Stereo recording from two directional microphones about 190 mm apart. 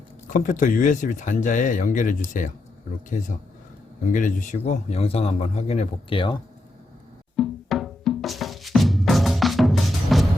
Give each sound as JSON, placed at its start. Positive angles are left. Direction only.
{"t": 0.3, "sound": "speech", "side_deg": 45}
{"t": 7.3, "sound": "music", "side_deg": 0}